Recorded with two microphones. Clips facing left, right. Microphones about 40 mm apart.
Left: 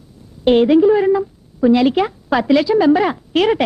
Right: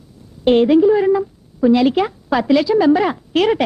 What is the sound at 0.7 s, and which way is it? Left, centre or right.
A woman's voice, centre.